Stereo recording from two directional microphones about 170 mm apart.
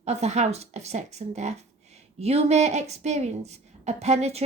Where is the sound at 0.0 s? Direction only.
40° right (ahead or behind).